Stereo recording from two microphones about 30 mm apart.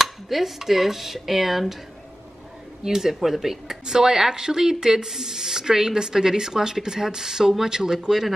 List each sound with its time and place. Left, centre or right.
0.0 s dishes: centre
2.8 s dishes: centre
3.8 s speech: centre